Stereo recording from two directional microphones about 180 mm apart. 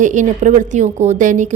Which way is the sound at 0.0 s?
40° right (ahead or behind).